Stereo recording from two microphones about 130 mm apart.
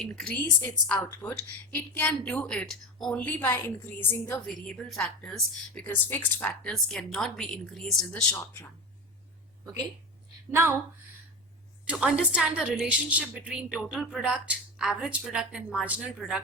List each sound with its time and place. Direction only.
0.0 s a woman's voice: 5° left (ahead or behind)
4.4 s a woman's voice: 5° left (ahead or behind)
10.5 s a woman's voice: 15° right (ahead or behind)
11.9 s a woman's voice: 10° right (ahead or behind)